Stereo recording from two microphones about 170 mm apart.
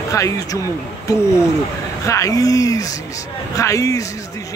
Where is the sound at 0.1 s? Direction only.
20° left (ahead or behind).